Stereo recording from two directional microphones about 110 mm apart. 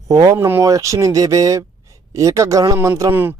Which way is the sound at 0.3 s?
20° right (ahead or behind).